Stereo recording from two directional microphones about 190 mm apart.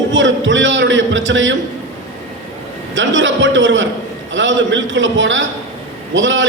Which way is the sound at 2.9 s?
75° right (ahead or behind).